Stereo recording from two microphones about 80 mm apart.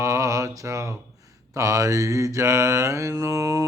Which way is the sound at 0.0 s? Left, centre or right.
Right.